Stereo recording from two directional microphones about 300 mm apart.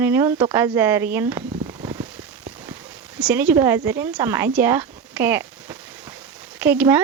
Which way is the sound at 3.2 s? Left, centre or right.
Centre.